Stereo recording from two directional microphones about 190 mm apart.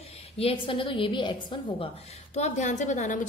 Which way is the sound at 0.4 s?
30° left (ahead or behind).